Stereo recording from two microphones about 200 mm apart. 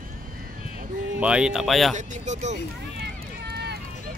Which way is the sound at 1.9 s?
35° right (ahead or behind).